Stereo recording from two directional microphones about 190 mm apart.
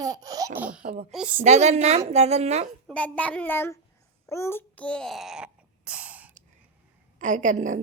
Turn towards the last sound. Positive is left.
turn(degrees=-40)  # may be behind; listen again after turning